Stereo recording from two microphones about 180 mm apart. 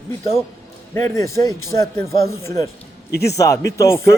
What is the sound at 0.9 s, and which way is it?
Speech, 15° left (ahead or behind).